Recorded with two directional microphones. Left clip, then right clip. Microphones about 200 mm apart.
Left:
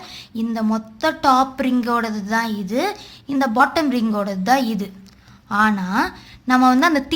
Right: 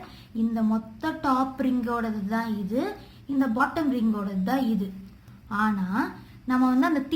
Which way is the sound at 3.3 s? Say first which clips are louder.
Left 8 dB; 55° left (ahead or behind).